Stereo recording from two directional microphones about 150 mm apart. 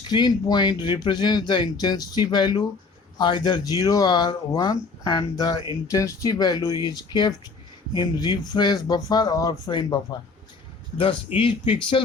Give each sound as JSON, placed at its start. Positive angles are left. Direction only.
{"t": 0.1, "sound": "speech", "side_deg": 30}